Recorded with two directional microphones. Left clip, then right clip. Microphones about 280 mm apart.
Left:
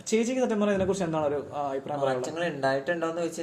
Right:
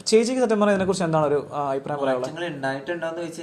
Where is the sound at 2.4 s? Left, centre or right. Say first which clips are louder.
Left 1 dB; left.